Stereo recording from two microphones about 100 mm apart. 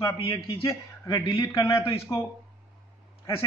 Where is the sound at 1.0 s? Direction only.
45° left (ahead or behind).